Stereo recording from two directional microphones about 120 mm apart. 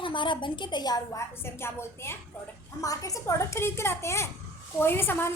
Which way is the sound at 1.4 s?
20° left (ahead or behind).